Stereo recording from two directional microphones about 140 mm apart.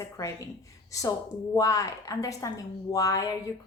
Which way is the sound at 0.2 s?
25° left (ahead or behind).